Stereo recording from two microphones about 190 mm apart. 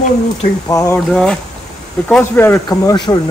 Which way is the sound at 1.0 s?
5° left (ahead or behind).